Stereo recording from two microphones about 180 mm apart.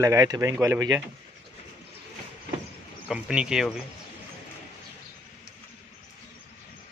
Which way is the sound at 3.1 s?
5° right (ahead or behind).